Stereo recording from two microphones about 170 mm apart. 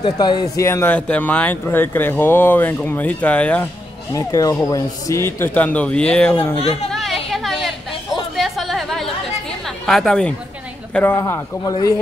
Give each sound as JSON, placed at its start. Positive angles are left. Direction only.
{"t": 0.0, "sound": "speech", "side_deg": 25}
{"t": 4.1, "sound": "speech", "side_deg": 20}
{"t": 6.6, "sound": "speech", "side_deg": 35}
{"t": 6.9, "sound": "chatter", "side_deg": 0}
{"t": 9.7, "sound": "speech", "side_deg": 0}